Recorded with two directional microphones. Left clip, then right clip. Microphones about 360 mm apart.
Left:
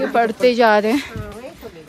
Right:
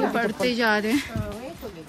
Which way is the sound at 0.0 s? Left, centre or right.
Centre.